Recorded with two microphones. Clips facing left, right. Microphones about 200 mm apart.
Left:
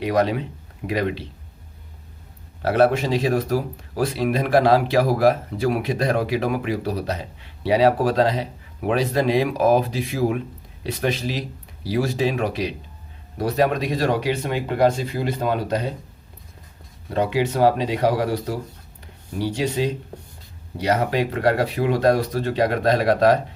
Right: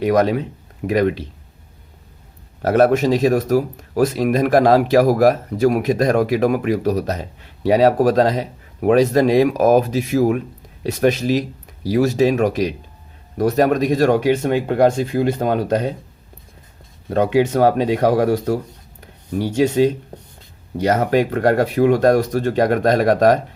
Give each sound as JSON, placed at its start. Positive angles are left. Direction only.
{"t": 0.0, "sound": "speech", "side_deg": -45}
{"t": 2.6, "sound": "speech", "side_deg": -45}
{"t": 17.2, "sound": "speech", "side_deg": -50}
{"t": 18.9, "sound": "a sound", "side_deg": -50}
{"t": 20.7, "sound": "speech", "side_deg": -45}